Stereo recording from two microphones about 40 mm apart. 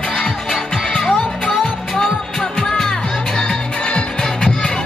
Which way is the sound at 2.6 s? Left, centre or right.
Centre.